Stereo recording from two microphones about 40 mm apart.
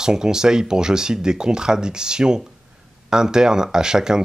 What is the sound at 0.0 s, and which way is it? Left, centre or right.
Speech, centre.